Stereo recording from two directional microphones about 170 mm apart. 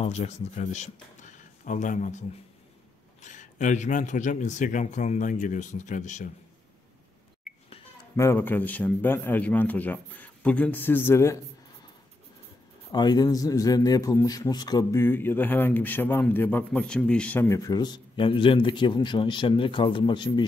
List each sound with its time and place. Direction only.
0.0 s speech: 40° left (ahead or behind)
8.2 s a man's voice: 15° left (ahead or behind)
12.9 s a man's voice: 25° left (ahead or behind)